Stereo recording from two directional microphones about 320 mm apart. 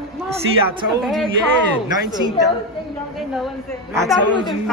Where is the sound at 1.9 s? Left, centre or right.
Centre.